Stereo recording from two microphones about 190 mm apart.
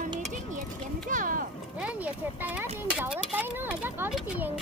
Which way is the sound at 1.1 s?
45° right (ahead or behind).